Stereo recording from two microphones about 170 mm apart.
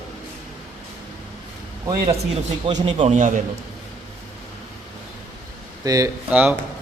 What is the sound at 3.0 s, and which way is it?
Speech, 45° right (ahead or behind).